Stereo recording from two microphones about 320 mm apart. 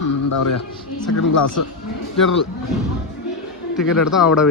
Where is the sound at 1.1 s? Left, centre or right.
Left.